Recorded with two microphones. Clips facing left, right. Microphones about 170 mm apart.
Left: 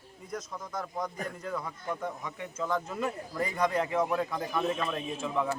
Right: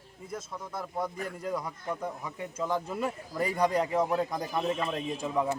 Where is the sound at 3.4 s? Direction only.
35° right (ahead or behind).